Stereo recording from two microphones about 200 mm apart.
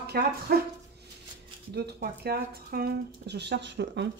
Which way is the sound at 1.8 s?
55° right (ahead or behind).